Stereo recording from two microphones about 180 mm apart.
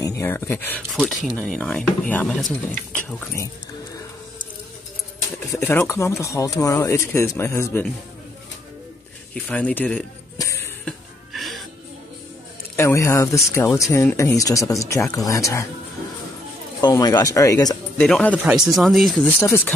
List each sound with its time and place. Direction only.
0.2 s speech: 15° left (ahead or behind)
5.5 s speech: 10° left (ahead or behind)
9.3 s speech: 5° left (ahead or behind)
10.3 s music: 15° left (ahead or behind)
11.3 s music: centre (ahead or behind)
12.7 s speech: 15° left (ahead or behind)
16.8 s speech: 20° left (ahead or behind)
18.0 s speech: 5° left (ahead or behind)